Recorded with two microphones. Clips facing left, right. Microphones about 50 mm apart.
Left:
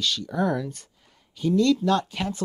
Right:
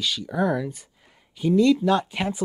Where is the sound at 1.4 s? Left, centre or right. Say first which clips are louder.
Right 2 dB; centre.